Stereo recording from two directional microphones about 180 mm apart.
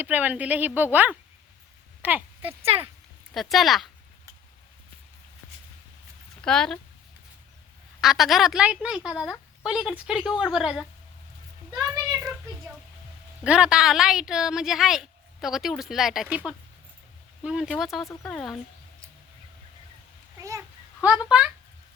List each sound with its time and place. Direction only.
0.0 s speech: 10° right (ahead or behind)
2.6 s speech: 35° right (ahead or behind)
3.3 s a woman's voice: centre (ahead or behind)
6.4 s speech: 5° left (ahead or behind)
8.0 s a woman's voice: centre (ahead or behind)
11.7 s a sound: 15° right (ahead or behind)
13.4 s a woman's voice: 5° right (ahead or behind)
20.4 s a sound: 20° right (ahead or behind)
21.0 s speech: 5° right (ahead or behind)